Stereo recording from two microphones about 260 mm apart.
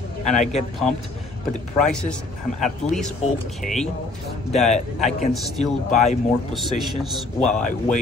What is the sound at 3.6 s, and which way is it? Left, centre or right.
Speech, left.